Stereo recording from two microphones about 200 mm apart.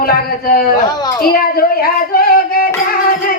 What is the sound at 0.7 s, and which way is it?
Speech, 20° left (ahead or behind).